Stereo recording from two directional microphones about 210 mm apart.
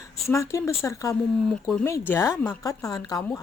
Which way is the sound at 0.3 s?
15° left (ahead or behind).